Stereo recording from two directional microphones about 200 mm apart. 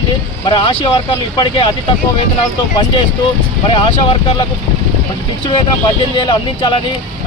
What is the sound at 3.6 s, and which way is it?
Speech, 25° left (ahead or behind).